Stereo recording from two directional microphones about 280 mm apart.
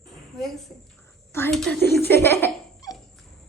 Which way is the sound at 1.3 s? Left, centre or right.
Centre.